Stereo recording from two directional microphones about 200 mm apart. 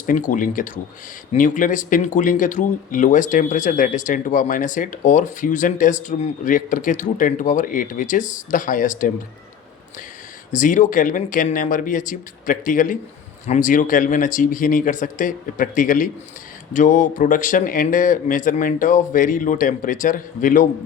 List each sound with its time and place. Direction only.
0.0 s speech: 40° left (ahead or behind)
10.5 s speech: 40° left (ahead or behind)